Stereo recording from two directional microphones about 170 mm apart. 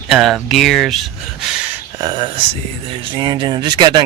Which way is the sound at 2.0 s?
25° right (ahead or behind).